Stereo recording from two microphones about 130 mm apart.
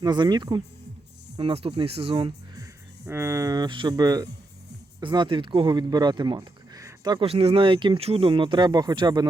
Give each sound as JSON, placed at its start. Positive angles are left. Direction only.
{"t": 0.0, "sound": "speech", "side_deg": -35}
{"t": 1.4, "sound": "speech", "side_deg": -45}
{"t": 3.1, "sound": "speech", "side_deg": -25}
{"t": 7.3, "sound": "speech", "side_deg": -45}